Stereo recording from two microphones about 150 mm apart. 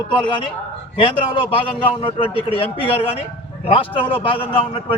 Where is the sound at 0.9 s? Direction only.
35° left (ahead or behind).